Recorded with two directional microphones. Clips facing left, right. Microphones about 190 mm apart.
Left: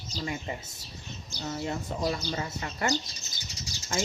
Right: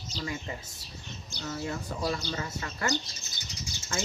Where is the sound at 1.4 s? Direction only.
25° left (ahead or behind).